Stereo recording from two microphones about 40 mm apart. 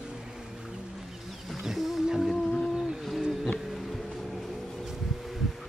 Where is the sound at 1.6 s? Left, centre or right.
Centre.